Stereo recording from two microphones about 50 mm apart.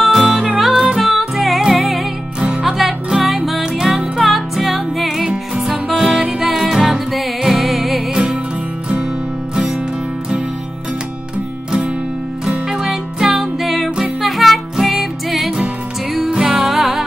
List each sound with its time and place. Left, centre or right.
0.0 s music: centre
2.4 s music: centre
2.8 s music: centre
12.4 s music: centre
16.1 s music: centre
16.4 s music: centre